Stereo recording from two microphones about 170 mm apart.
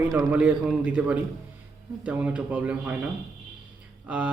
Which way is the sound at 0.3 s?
10° right (ahead or behind).